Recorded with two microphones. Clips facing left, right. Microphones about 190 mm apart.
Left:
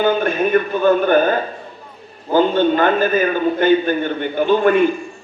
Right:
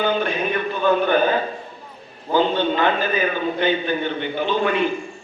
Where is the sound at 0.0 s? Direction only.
45° left (ahead or behind).